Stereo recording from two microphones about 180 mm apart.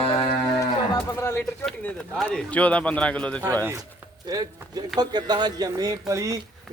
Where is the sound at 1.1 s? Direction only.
15° left (ahead or behind).